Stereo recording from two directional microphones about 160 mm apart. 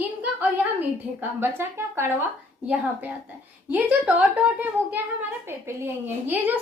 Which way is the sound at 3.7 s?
10° right (ahead or behind).